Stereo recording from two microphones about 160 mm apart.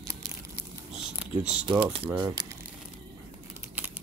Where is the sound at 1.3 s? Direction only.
45° right (ahead or behind).